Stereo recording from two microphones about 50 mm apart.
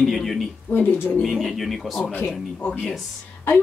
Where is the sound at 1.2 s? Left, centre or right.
Centre.